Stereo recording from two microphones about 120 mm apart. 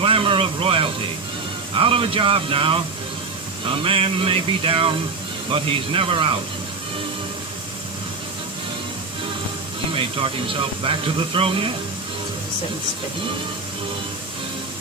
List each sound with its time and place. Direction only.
0.0 s a sound: 45° right (ahead or behind)
1.7 s speech: 50° right (ahead or behind)
3.8 s speech: 50° right (ahead or behind)
9.9 s speech: 45° right (ahead or behind)